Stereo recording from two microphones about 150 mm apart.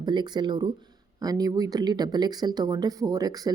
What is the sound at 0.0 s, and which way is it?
Speech, 30° right (ahead or behind).